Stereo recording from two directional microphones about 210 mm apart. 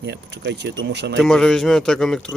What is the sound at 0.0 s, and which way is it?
Speech, 55° right (ahead or behind).